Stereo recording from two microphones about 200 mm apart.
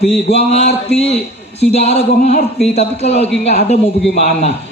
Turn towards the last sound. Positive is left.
turn(degrees=30)  # may be behind; listen again after turning